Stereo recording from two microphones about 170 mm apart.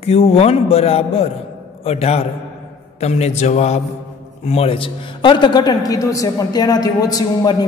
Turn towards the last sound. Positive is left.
turn(degrees=20)  # may be behind; listen again after turning